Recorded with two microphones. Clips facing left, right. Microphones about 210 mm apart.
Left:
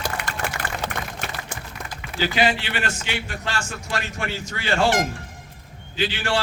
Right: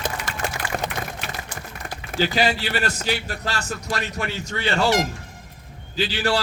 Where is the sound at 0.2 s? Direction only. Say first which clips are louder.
Left 1 dB; 60° left (ahead or behind).